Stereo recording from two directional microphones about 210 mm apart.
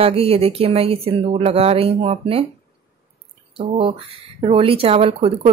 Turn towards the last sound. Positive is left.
turn(degrees=-25)  # may be behind; listen again after turning